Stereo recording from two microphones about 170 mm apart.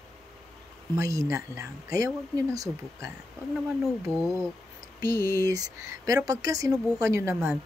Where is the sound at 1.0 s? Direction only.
20° right (ahead or behind).